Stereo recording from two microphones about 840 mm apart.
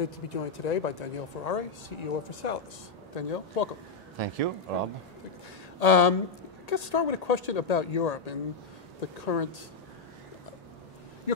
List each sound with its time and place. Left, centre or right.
0.0 s speech: left
4.2 s speech: right
5.8 s speech: left
11.3 s a sound: left